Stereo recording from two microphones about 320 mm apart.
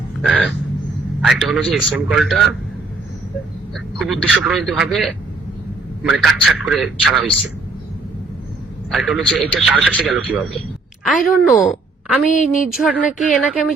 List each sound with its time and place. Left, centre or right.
0.2 s wild animals: centre
1.2 s a man's voice: centre
3.9 s a man's voice: centre
8.9 s a man's voice: centre
12.2 s a woman's voice: left
12.6 s a man's voice: centre